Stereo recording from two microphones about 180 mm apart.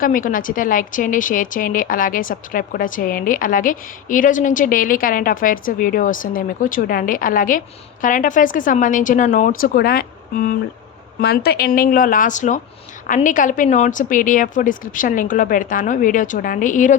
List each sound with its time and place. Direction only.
0.0 s a woman's voice: 50° left (ahead or behind)